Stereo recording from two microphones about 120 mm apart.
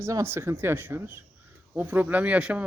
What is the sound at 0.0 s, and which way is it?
Speech, 20° right (ahead or behind).